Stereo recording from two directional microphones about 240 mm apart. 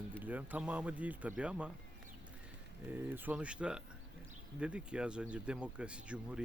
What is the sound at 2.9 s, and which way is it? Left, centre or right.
Speech, centre.